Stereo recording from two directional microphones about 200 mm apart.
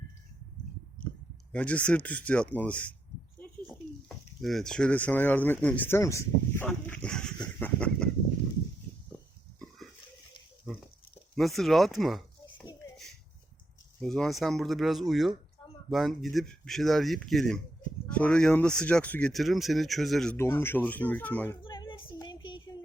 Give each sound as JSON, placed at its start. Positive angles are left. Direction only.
{"t": 1.5, "sound": "speech", "side_deg": 5}
{"t": 4.4, "sound": "speech", "side_deg": 0}
{"t": 6.7, "sound": "dog", "side_deg": 5}
{"t": 7.6, "sound": "chicken", "side_deg": 5}
{"t": 9.6, "sound": "pig", "side_deg": 0}
{"t": 11.3, "sound": "speech", "side_deg": 0}
{"t": 14.0, "sound": "speech", "side_deg": 0}
{"t": 20.3, "sound": "speech", "side_deg": 10}
{"t": 21.6, "sound": "a sound", "side_deg": 25}
{"t": 22.2, "sound": "child singing", "side_deg": 20}